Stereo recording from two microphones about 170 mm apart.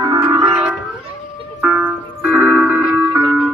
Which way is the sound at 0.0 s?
25° right (ahead or behind).